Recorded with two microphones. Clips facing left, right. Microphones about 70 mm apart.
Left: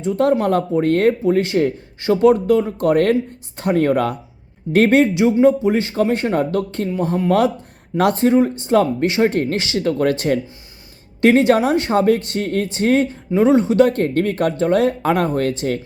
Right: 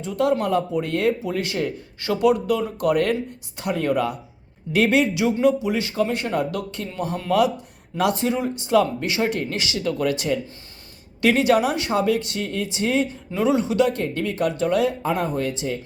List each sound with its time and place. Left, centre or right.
0.2 s speech: left
1.2 s speech: left
5.1 s speech: left
11.2 s speech: left
13.3 s speech: left
15.0 s speech: left